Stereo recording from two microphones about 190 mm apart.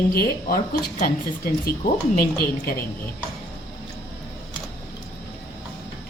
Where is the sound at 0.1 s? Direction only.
55° left (ahead or behind).